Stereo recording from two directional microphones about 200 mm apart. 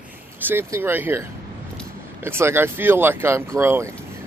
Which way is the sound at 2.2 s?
10° right (ahead or behind).